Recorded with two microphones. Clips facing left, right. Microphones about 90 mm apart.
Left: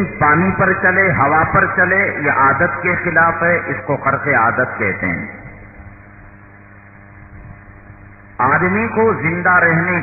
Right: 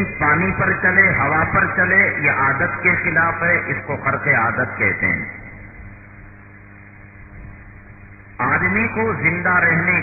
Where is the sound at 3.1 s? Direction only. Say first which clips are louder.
Left 7 dB; 45° left (ahead or behind).